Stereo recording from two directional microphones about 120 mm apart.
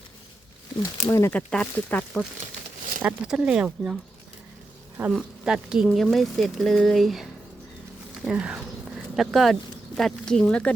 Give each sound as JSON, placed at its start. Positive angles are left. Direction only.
{"t": 1.0, "sound": "speech", "side_deg": 25}
{"t": 1.3, "sound": "speech", "side_deg": 10}
{"t": 3.0, "sound": "speech", "side_deg": -10}
{"t": 5.1, "sound": "speech", "side_deg": -5}